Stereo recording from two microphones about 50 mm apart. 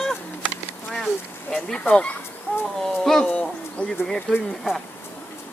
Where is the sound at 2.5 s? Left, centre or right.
Left.